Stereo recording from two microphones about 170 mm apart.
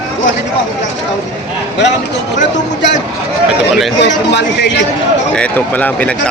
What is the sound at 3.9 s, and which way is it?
Speech, 90° left.